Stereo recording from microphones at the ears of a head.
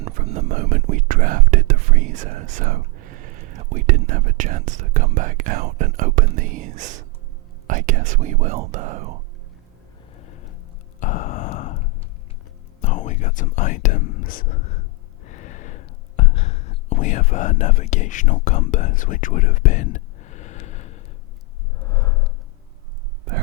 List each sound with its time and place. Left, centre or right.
0.0 s speech: right
10.2 s a sound: left
11.0 s sigh: left
12.8 s whispering: left